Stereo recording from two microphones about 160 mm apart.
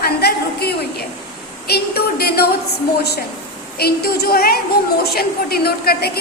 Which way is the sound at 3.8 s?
80° left.